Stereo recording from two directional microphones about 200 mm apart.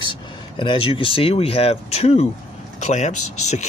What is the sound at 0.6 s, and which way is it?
Speech, 25° left (ahead or behind).